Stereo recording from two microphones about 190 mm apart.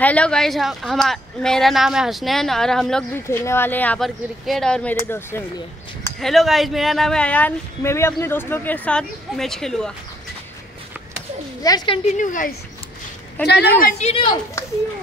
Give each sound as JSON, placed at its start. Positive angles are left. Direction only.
{"t": 0.0, "sound": "speech", "side_deg": 5}
{"t": 3.3, "sound": "speech", "side_deg": 15}
{"t": 6.1, "sound": "speech", "side_deg": 0}
{"t": 11.6, "sound": "a woman's voice", "side_deg": 20}
{"t": 12.2, "sound": "speech", "side_deg": 45}
{"t": 13.5, "sound": "a woman's voice", "side_deg": 60}